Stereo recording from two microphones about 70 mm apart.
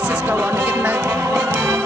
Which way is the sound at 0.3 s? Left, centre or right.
Right.